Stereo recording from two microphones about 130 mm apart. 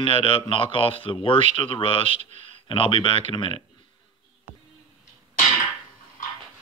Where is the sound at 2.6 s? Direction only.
45° left (ahead or behind).